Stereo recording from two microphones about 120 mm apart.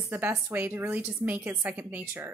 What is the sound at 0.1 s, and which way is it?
A woman's voice, 20° right (ahead or behind).